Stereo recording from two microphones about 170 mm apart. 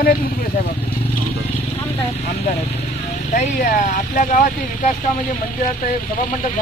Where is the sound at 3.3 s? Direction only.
45° left (ahead or behind).